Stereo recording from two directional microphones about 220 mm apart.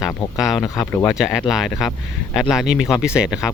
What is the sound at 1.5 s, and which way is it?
Speech, centre (ahead or behind).